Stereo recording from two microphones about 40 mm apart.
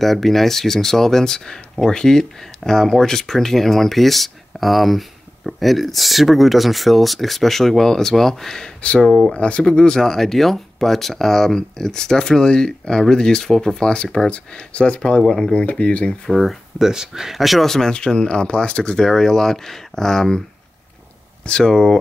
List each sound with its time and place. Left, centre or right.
0.0 s speech: centre
9.3 s speech: left
9.7 s speech: centre; by 15.0 s left
15.2 s speech: centre
15.5 s speech: left
16.3 s speech: centre
16.7 s speech: centre
17.6 s speech: centre
17.9 s speech: left
18.9 s speech: centre
21.5 s speech: centre